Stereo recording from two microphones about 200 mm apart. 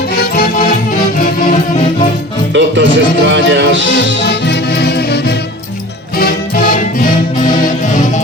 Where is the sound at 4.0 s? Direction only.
55° left (ahead or behind); by 8.1 s 40° left (ahead or behind).